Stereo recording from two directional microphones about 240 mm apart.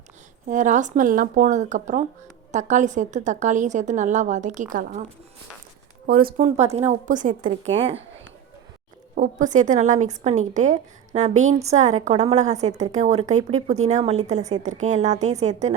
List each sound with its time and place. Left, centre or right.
0.4 s a woman's voice: right
6.1 s a woman's voice: right
9.1 s a woman's voice: right